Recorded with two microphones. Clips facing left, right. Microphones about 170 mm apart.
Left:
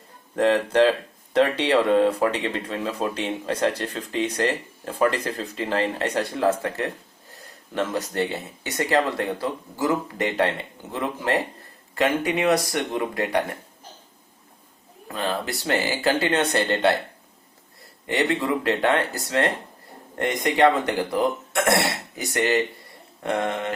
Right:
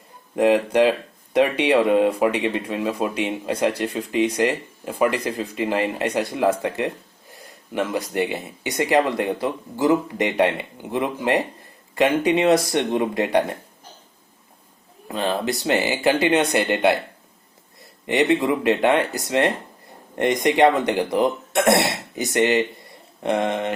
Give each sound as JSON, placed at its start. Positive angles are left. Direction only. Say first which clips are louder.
{"t": 0.3, "sound": "speech", "louder": "right 2 dB", "side_deg": -15}
{"t": 15.0, "sound": "speech", "louder": "right 4 dB", "side_deg": -20}
{"t": 18.0, "sound": "speech", "louder": "right 5 dB", "side_deg": -20}